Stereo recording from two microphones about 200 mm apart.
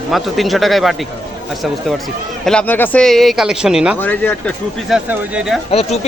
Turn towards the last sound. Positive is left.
turn(degrees=30)  # may be behind; listen again after turning